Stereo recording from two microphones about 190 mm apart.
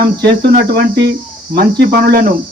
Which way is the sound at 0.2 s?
60° right (ahead or behind).